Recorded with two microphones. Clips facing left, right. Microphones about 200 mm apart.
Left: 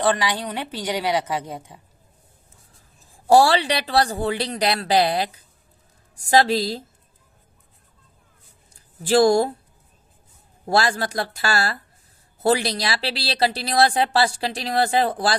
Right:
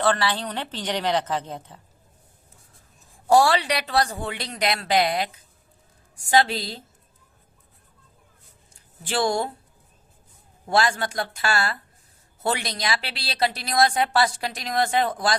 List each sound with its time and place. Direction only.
0.0 s a woman's voice: 15° left (ahead or behind)
3.2 s a woman's voice: 30° left (ahead or behind)
8.7 s speech: 40° left (ahead or behind)
10.7 s a woman's voice: 35° left (ahead or behind)